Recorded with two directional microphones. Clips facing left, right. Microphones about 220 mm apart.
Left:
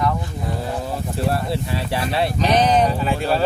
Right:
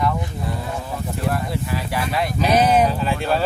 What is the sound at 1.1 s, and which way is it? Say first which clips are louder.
Speech: left 2 dB; 30° left (ahead or behind).